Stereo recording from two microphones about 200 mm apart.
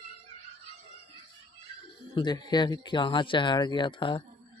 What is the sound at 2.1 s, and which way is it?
Speech, 20° left (ahead or behind).